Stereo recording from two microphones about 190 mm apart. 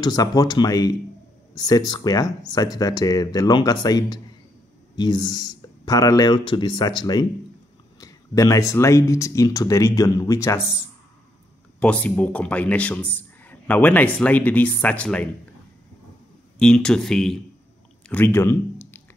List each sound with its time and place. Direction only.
0.0 s speech: 20° left (ahead or behind)
11.8 s speech: 5° left (ahead or behind)
16.5 s speech: 5° left (ahead or behind)
18.0 s a sound: 10° left (ahead or behind)